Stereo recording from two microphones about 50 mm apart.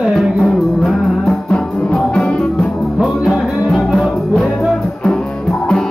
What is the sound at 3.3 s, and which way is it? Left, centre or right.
Music, centre.